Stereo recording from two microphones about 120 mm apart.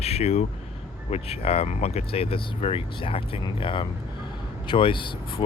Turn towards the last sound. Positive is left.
turn(degrees=45)  # may be behind; listen again after turning